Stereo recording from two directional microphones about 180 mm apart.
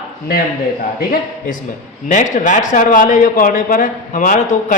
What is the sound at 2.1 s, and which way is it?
A man's voice, 45° left (ahead or behind).